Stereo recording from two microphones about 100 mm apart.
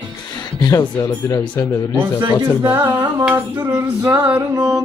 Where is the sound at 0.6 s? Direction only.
40° left (ahead or behind).